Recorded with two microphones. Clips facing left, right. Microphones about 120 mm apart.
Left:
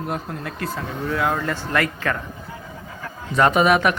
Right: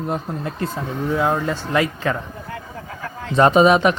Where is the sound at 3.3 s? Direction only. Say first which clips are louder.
Right 3 dB; 25° right (ahead or behind).